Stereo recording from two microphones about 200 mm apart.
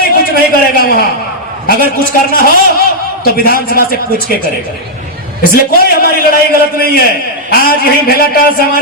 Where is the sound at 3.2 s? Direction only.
45° left (ahead or behind).